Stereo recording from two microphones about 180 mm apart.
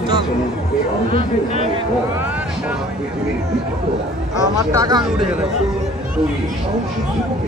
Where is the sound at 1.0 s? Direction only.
30° left (ahead or behind).